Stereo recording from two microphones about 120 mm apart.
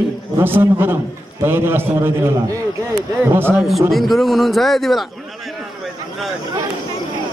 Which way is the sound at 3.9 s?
Centre (ahead or behind).